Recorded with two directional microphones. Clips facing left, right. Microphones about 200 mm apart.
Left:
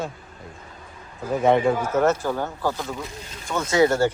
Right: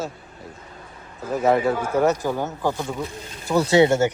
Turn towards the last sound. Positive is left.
turn(degrees=-25)  # may be behind; listen again after turning